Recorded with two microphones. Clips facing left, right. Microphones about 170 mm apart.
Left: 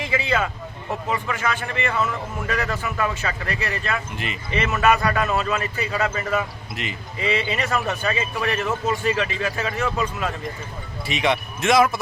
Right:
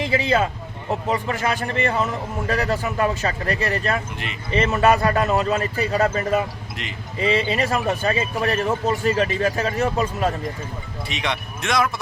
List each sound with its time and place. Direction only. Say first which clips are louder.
0.0 s a man's voice: right 3 dB; 35° right (ahead or behind)
11.1 s a man's voice: left 5 dB; 5° left (ahead or behind)